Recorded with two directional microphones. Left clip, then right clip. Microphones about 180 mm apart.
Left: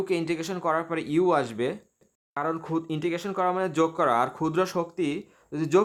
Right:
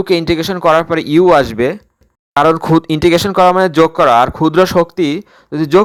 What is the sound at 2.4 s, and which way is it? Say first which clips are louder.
Speech: right 18 dB; 50° right (ahead or behind).